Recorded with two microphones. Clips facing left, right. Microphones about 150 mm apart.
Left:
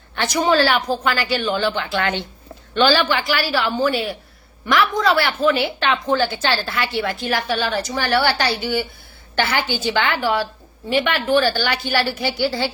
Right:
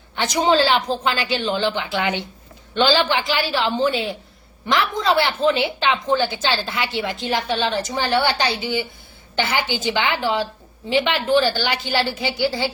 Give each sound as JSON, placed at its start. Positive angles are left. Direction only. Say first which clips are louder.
{"t": 0.2, "sound": "a woman's voice", "louder": "even", "side_deg": -20}